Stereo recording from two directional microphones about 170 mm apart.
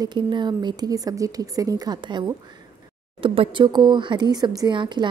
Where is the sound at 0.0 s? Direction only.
25° right (ahead or behind).